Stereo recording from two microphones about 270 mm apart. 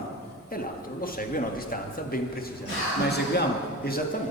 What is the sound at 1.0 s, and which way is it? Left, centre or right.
A man's voice, left.